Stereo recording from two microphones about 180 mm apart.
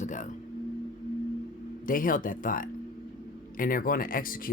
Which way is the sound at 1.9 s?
50° left (ahead or behind).